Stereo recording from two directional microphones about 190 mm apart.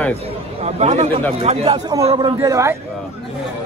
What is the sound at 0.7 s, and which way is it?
Speech, 35° right (ahead or behind).